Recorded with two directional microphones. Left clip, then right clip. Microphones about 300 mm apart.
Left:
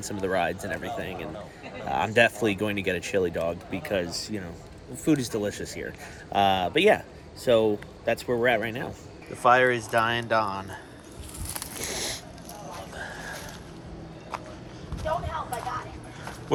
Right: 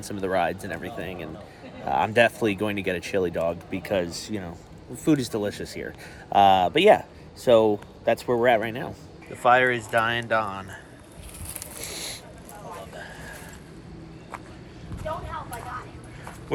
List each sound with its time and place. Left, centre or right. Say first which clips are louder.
0.0 s speech: right 2 dB; centre
9.4 s speech: right 1 dB; centre
11.8 s a sound: left 3 dB; left